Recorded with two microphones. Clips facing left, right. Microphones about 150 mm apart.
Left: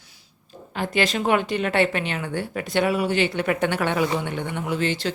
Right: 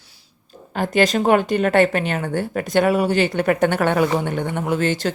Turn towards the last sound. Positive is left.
turn(degrees=-45)  # may be behind; listen again after turning